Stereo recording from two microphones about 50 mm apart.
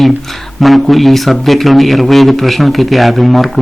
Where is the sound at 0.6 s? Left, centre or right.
Centre.